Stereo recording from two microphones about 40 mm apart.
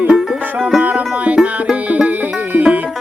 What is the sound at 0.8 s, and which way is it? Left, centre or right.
Music, right.